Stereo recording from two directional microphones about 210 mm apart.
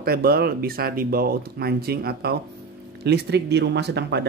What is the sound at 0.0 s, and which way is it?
Speech, 45° right (ahead or behind).